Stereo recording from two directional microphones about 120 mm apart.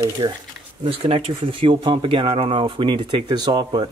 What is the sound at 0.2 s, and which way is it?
Speech, 30° right (ahead or behind).